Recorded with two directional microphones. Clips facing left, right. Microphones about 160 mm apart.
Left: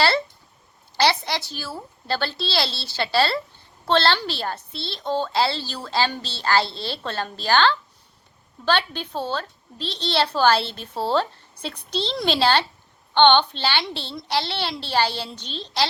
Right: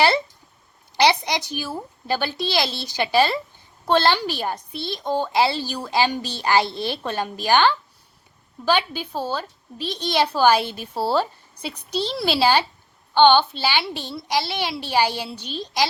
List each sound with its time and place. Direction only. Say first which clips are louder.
0.9 s a child's voice: right 2 dB; 15° right (ahead or behind)